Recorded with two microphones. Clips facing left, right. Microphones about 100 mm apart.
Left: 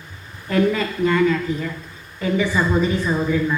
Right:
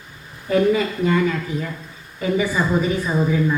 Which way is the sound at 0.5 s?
10° right (ahead or behind).